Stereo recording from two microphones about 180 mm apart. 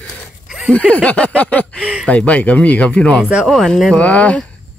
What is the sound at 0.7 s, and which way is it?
Speech, 5° left (ahead or behind).